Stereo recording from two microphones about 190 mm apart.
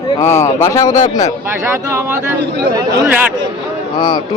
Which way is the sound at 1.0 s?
40° left (ahead or behind).